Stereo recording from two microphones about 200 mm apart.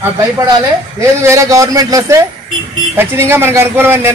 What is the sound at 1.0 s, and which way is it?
A man's voice, 15° right (ahead or behind).